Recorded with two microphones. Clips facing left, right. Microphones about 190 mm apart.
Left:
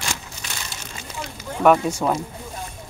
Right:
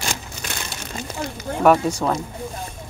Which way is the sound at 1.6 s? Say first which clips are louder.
Even; centre (ahead or behind).